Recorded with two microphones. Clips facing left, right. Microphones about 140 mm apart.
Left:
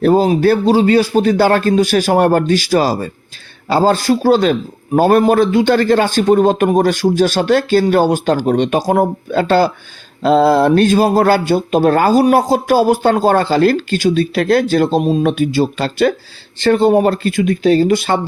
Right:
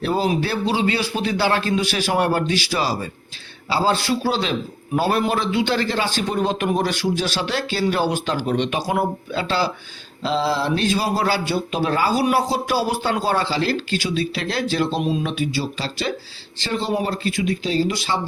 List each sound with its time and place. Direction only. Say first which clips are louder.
0.0 s speech: left 10 dB; 45° left (ahead or behind)